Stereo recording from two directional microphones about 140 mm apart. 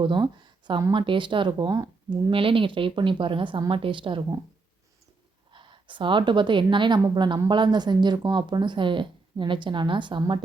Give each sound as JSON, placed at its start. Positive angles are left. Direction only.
{"t": 0.0, "sound": "speech", "side_deg": -35}
{"t": 2.3, "sound": "speech", "side_deg": -40}
{"t": 5.5, "sound": "a woman's voice", "side_deg": -35}